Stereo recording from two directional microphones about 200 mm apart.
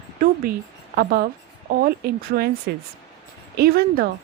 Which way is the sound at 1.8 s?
50° right (ahead or behind).